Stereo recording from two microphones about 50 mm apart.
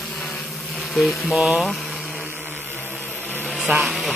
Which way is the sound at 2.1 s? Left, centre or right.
Right.